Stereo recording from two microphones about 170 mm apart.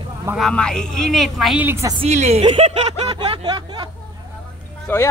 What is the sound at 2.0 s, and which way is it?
Speech, 40° right (ahead or behind).